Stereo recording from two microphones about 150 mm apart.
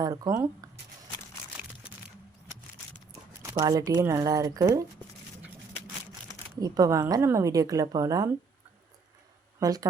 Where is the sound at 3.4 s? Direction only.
20° right (ahead or behind).